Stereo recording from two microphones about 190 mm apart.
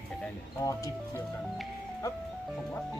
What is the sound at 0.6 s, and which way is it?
Speech, 15° left (ahead or behind).